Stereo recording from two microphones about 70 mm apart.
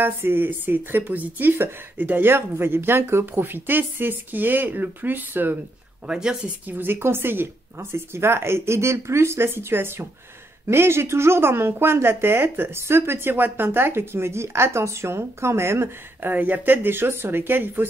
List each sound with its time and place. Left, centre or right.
0.0 s speech: right
6.0 s speech: centre
6.7 s a woman's voice: right